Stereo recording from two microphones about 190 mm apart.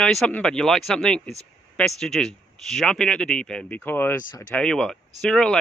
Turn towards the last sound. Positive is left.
turn(degrees=5)  # may be behind; listen again after turning